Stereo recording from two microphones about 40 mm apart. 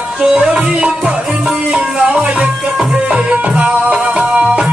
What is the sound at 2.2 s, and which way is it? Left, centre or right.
Music, centre.